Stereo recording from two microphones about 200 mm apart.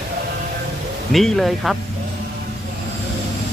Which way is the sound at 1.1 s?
Centre (ahead or behind).